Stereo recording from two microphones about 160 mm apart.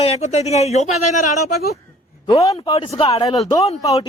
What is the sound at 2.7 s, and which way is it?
Speech, 35° left (ahead or behind).